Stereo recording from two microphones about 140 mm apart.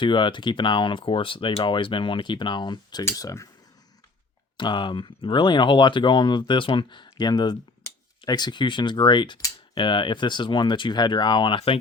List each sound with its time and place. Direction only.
0.0 s speech: 35° left (ahead or behind)
3.0 s speech: 20° left (ahead or behind)
4.5 s speech: 35° left (ahead or behind)